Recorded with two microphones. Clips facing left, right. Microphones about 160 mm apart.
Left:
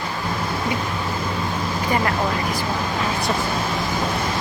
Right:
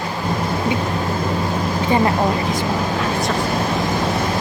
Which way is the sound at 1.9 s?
25° right (ahead or behind).